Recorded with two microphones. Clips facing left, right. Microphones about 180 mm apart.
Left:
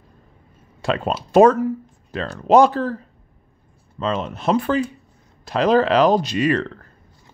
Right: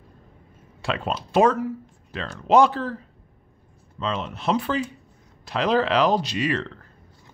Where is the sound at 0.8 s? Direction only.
40° left (ahead or behind).